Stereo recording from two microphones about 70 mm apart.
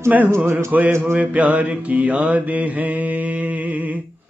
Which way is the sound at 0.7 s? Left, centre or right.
Centre.